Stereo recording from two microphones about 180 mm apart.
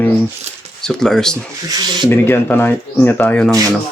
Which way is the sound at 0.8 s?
5° left (ahead or behind).